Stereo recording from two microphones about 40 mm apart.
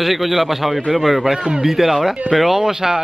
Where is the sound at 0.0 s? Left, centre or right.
Centre.